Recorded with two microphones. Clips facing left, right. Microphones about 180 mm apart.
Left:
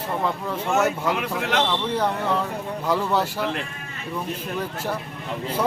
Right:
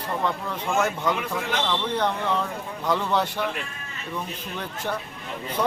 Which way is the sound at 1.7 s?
5° left (ahead or behind).